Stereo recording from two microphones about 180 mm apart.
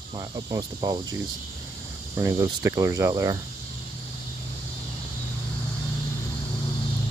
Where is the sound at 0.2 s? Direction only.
20° right (ahead or behind).